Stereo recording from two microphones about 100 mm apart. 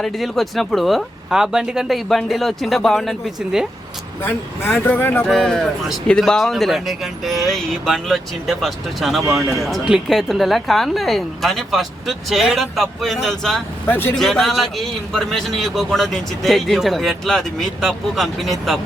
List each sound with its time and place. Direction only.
0.0 s a man's voice: centre (ahead or behind)
4.2 s speech: 25° left (ahead or behind)
5.2 s a man's voice: 5° left (ahead or behind)
13.8 s speech: 20° left (ahead or behind)
14.2 s a man's voice: 5° left (ahead or behind)